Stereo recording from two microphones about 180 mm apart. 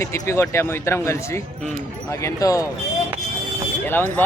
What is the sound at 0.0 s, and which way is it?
Speech, 15° left (ahead or behind).